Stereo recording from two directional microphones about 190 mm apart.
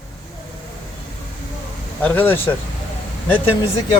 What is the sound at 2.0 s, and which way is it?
Speech, 10° left (ahead or behind).